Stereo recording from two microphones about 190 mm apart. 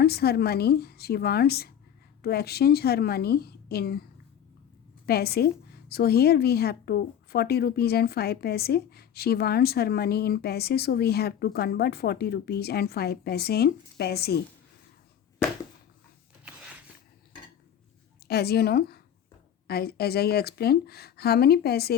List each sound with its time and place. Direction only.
0.0 s a woman's voice: 55° left (ahead or behind)
5.0 s a woman's voice: 55° left (ahead or behind)
18.3 s a woman's voice: 55° left (ahead or behind)